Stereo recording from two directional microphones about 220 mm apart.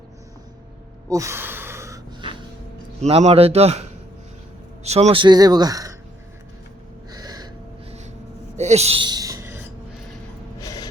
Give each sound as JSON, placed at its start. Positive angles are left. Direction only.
{"t": 1.1, "sound": "gasp", "side_deg": -15}
{"t": 3.0, "sound": "a man's voice", "side_deg": -30}
{"t": 7.1, "sound": "gasp", "side_deg": -15}
{"t": 8.5, "sound": "a sound", "side_deg": -30}
{"t": 10.6, "sound": "gasp", "side_deg": 15}